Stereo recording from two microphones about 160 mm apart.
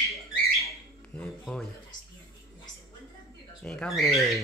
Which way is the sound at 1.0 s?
5° left (ahead or behind).